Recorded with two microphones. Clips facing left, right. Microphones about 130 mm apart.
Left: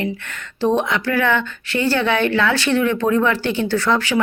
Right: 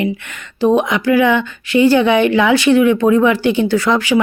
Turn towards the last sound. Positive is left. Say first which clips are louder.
# right 4 dB
turn(degrees=-10)  # may be behind; listen again after turning